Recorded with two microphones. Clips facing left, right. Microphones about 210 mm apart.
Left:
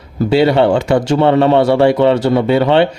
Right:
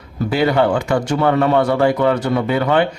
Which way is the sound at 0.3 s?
25° left (ahead or behind).